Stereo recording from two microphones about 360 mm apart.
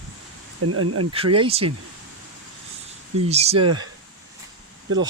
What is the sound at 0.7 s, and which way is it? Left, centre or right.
Speech, right.